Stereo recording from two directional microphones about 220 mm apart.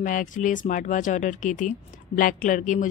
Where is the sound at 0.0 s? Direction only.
35° left (ahead or behind).